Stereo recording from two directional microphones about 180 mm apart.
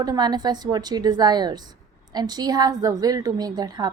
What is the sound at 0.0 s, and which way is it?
A woman's voice, 20° right (ahead or behind).